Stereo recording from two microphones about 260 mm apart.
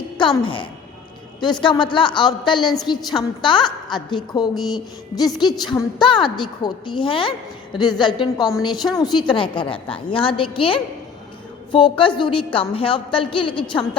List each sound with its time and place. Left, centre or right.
0.2 s a woman's voice: centre